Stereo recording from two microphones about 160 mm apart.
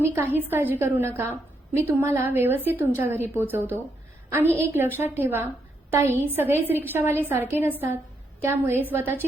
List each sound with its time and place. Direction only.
0.0 s a woman's voice: 15° right (ahead or behind)